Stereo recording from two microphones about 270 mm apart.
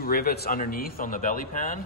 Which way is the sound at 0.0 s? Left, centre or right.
Left.